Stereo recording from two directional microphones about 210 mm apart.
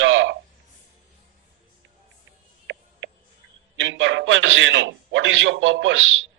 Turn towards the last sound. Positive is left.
turn(degrees=-65)  # may be behind; listen again after turning